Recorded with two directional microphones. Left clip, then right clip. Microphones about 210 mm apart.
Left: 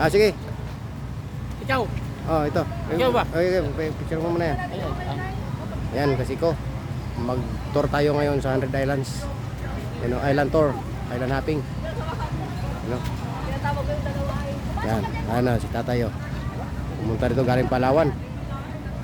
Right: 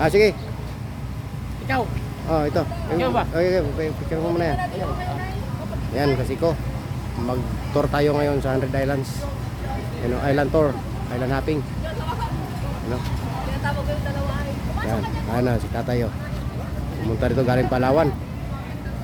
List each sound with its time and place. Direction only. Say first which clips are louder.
0.0 s speech: right 2 dB; centre (ahead or behind)
1.7 s speech: even; 30° left (ahead or behind)
2.3 s speech: right 1 dB; 5° right (ahead or behind)
3.0 s speech: left 2 dB; 45° left (ahead or behind)
3.3 s speech: right 2 dB; centre (ahead or behind)
6.0 s speech: right 2 dB; 5° right (ahead or behind)
10.2 s speech: right 1 dB; centre (ahead or behind)
14.9 s speech: even; 5° left (ahead or behind)
17.2 s speech: right 1 dB; centre (ahead or behind)